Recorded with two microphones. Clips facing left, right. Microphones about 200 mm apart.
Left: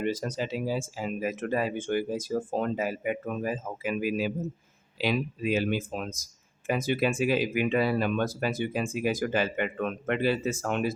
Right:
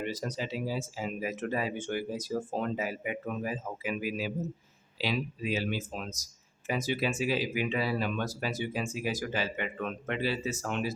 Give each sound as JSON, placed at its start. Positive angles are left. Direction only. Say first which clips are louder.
{"t": 0.0, "sound": "speech", "louder": "left 5 dB", "side_deg": 50}